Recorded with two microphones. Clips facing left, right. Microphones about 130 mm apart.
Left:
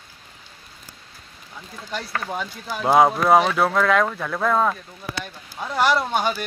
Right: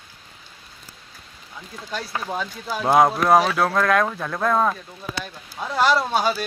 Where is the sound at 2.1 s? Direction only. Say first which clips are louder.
Even; 15° right (ahead or behind).